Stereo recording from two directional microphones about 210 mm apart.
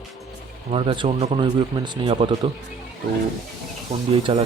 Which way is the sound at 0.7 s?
25° right (ahead or behind).